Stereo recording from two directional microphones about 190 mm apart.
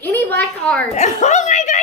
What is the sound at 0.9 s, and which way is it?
Chuckle, 35° left (ahead or behind).